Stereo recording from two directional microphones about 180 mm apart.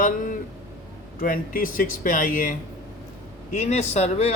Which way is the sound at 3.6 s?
40° left (ahead or behind).